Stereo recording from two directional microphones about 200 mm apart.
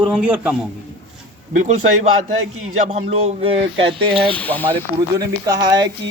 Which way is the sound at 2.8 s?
30° right (ahead or behind).